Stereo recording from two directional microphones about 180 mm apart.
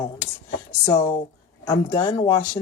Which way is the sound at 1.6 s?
20° left (ahead or behind).